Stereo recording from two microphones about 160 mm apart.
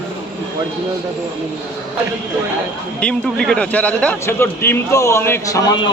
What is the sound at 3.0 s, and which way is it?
A man's voice, 5° left (ahead or behind).